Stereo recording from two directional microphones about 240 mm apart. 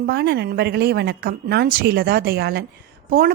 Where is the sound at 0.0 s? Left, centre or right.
Right.